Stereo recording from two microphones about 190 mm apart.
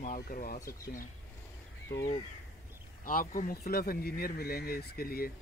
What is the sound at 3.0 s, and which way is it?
Speech, 45° left (ahead or behind).